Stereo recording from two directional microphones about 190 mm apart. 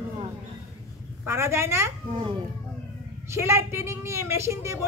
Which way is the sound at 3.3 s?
15° right (ahead or behind).